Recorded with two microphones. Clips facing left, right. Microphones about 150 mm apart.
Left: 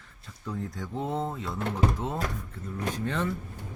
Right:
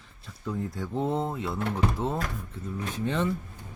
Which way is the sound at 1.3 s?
10° right (ahead or behind).